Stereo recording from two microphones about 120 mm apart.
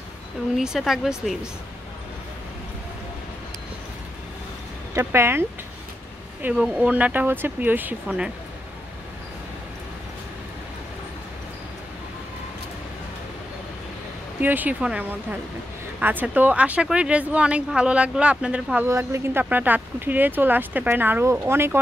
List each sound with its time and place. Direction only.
0.6 s speech: 5° right (ahead or behind)
4.9 s speech: 20° right (ahead or behind)
6.5 s speech: 5° right (ahead or behind)
14.4 s speech: 15° right (ahead or behind)
18.9 s speech: 25° right (ahead or behind)